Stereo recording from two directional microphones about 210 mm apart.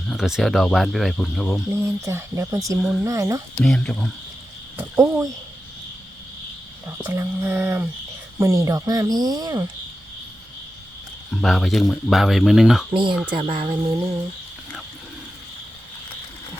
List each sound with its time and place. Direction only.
0.1 s speech: centre (ahead or behind)
1.7 s speech: 10° right (ahead or behind)
3.6 s speech: 5° left (ahead or behind)
4.8 s speech: 10° right (ahead or behind)
7.0 s speech: 10° right (ahead or behind)
11.3 s speech: centre (ahead or behind)
12.9 s a sound: 25° right (ahead or behind)